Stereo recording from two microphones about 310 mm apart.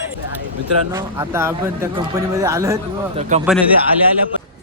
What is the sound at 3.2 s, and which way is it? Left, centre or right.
Speech, right.